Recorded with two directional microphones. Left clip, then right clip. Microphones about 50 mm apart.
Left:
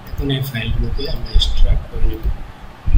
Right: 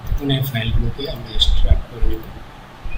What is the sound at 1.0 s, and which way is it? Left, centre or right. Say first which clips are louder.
Speech: right 2 dB; centre.